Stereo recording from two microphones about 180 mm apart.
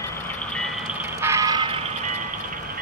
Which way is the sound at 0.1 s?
10° left (ahead or behind).